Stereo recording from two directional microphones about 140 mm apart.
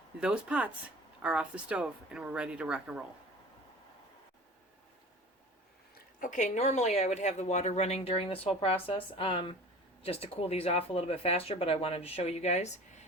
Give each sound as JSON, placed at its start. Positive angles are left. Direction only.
{"t": 0.2, "sound": "speech", "side_deg": -10}
{"t": 5.9, "sound": "a woman's voice", "side_deg": 75}